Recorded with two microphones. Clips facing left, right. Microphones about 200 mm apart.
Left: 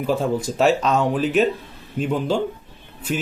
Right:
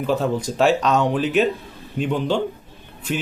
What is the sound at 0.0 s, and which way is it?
Speech, 5° left (ahead or behind).